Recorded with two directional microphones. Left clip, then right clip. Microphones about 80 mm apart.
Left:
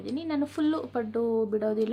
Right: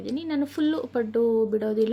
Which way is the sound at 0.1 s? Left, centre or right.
Right.